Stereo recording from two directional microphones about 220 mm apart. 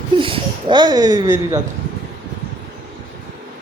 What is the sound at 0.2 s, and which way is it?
Speech, 20° right (ahead or behind).